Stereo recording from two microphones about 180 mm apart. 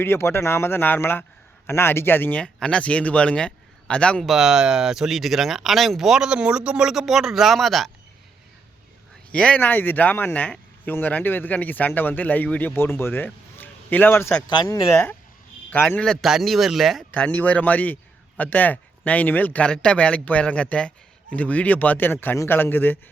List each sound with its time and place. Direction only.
0.0 s speech: 15° left (ahead or behind)
9.3 s speech: 5° left (ahead or behind)
14.5 s speech: 25° left (ahead or behind)